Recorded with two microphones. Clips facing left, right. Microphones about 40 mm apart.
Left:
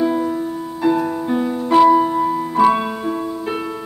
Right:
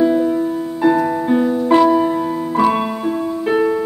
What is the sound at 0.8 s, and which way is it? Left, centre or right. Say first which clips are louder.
Music: right 3 dB; centre.